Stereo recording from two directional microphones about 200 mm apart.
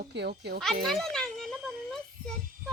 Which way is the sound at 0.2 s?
55° right (ahead or behind).